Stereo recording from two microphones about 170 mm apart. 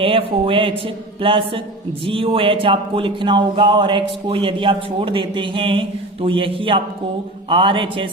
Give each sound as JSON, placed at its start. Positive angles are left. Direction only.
{"t": 0.0, "sound": "speech", "side_deg": -30}